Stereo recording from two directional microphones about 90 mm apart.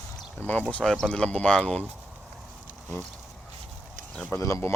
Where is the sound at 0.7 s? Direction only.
5° left (ahead or behind).